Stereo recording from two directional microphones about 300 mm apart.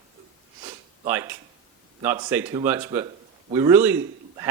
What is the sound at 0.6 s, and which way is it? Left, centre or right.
Sniff, centre.